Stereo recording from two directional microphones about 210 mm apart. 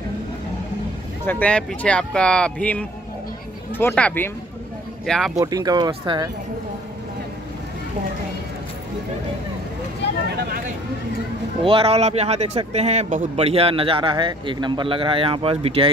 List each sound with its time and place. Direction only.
1.2 s speech: 10° left (ahead or behind)
5.4 s speech: 15° right (ahead or behind)
11.6 s speech: 25° right (ahead or behind)